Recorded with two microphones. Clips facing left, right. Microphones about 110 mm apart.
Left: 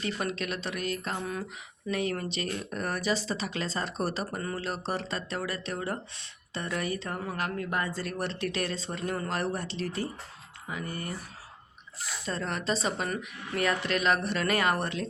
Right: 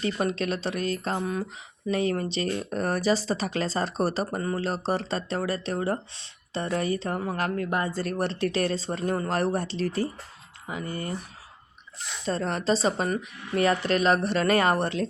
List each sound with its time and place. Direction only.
0.0 s speech: 30° right (ahead or behind)
10.7 s speech: 25° right (ahead or behind)
12.2 s speech: 35° right (ahead or behind)